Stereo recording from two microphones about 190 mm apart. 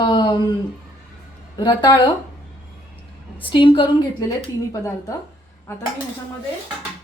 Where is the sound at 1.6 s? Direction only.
20° left (ahead or behind).